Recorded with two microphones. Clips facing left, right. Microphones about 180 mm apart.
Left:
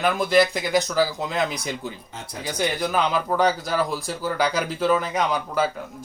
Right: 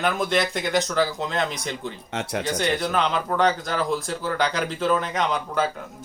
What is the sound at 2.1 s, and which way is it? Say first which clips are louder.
Speech: right 9 dB; 80° right.